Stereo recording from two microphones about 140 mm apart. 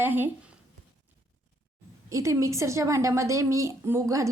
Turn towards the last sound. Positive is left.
turn(degrees=-20)  # may be behind; listen again after turning